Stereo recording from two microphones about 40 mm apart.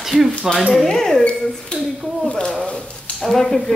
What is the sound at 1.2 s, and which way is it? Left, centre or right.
A child's voice, left.